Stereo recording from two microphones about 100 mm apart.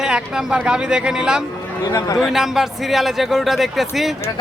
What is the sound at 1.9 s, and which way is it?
Speech, 35° left (ahead or behind).